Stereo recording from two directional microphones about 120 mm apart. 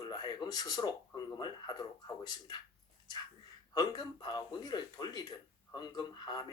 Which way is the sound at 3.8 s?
35° left (ahead or behind).